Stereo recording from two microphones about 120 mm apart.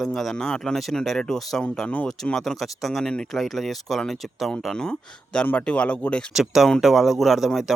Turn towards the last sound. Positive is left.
turn(degrees=0)  # may be behind; listen again after turning